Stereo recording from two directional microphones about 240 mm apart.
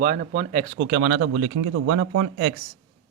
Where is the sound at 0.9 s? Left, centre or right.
Right.